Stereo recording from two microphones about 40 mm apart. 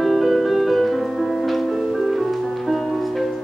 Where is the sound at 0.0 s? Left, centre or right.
Centre.